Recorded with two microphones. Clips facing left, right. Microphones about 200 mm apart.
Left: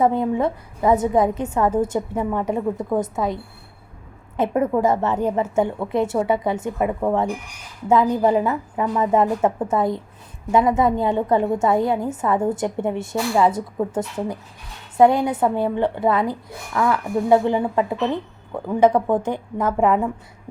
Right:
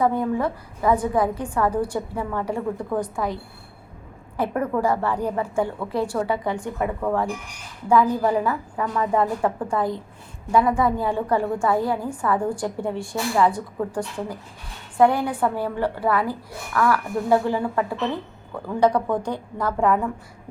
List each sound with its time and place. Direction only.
0.0 s a woman's voice: 20° left (ahead or behind)
4.4 s a woman's voice: 20° left (ahead or behind)